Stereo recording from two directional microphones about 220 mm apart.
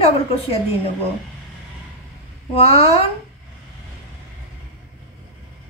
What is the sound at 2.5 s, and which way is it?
Speech, 25° left (ahead or behind).